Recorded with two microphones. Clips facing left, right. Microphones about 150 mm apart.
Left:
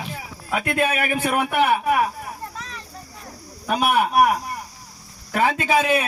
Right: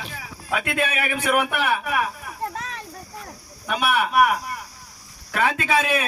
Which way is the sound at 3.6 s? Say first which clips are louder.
Left 3 dB; 40° left (ahead or behind).